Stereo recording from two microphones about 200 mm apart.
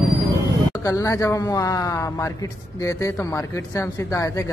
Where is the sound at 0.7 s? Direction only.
15° left (ahead or behind).